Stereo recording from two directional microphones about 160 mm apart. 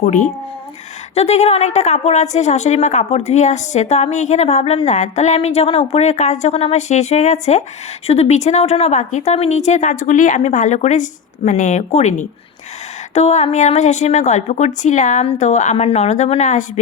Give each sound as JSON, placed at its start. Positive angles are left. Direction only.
{"t": 0.0, "sound": "a woman's voice", "side_deg": 50}
{"t": 1.1, "sound": "a woman's voice", "side_deg": 40}